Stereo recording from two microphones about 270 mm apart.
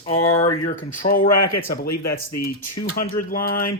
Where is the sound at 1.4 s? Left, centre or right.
Left.